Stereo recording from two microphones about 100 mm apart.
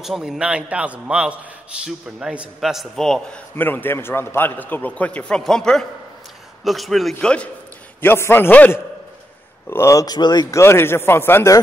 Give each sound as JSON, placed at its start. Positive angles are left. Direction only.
{"t": 0.0, "sound": "a man's voice", "side_deg": 0}
{"t": 3.5, "sound": "a man's voice", "side_deg": 20}
{"t": 8.0, "sound": "a man's voice", "side_deg": 20}
{"t": 9.7, "sound": "speech", "side_deg": 30}
{"t": 10.1, "sound": "speech", "side_deg": 45}
{"t": 10.5, "sound": "a man's voice", "side_deg": 25}